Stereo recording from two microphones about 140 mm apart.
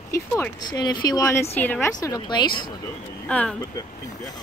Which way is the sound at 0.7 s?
30° left (ahead or behind).